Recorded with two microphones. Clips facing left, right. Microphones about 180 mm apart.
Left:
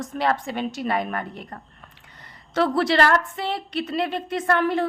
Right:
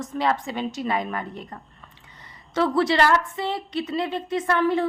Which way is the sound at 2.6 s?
70° left (ahead or behind).